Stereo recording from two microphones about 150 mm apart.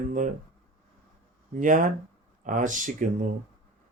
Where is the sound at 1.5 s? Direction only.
60° right (ahead or behind).